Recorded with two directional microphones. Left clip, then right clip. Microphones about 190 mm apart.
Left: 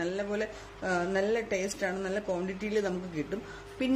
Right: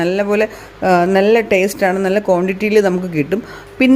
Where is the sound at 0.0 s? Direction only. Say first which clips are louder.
Right 17 dB; 40° right (ahead or behind).